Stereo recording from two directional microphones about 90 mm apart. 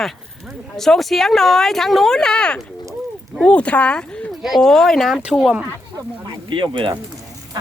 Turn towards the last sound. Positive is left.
turn(degrees=-65)  # may be behind; listen again after turning